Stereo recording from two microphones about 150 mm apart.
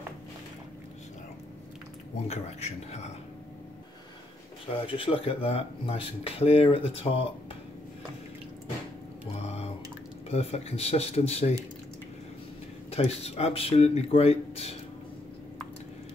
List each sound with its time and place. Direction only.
2.2 s speech: 45° left (ahead or behind)
4.7 s speech: 35° left (ahead or behind)
9.4 s drip: 45° left (ahead or behind)
10.3 s speech: 45° left (ahead or behind)
12.9 s speech: 45° left (ahead or behind)